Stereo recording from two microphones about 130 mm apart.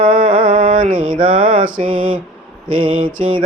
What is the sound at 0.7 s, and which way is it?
Mantra, 90° right.